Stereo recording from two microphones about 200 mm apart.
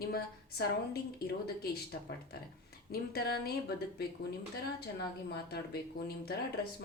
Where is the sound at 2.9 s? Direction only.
50° left (ahead or behind).